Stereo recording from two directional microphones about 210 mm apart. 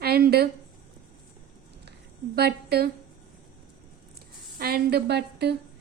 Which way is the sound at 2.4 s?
50° right (ahead or behind).